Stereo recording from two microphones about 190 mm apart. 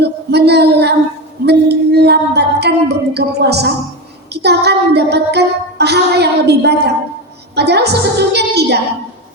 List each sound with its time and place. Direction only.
0.0 s female singing: 60° right (ahead or behind)
1.5 s music: 60° right (ahead or behind)
4.3 s child singing: 60° right (ahead or behind)
7.5 s a woman's voice: 60° right (ahead or behind)